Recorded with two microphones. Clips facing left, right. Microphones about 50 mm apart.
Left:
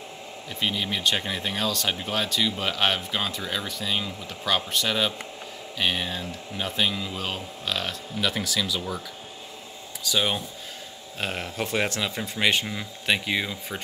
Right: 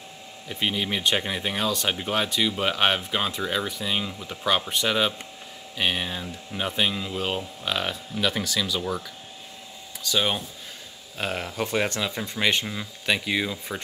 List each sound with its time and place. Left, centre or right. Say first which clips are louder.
0.5 s speech: right 1 dB; centre
8.2 s speech: right 1 dB; centre
10.0 s speech: even; centre